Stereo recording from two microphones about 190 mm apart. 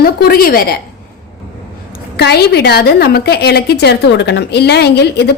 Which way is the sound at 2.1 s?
60° left (ahead or behind).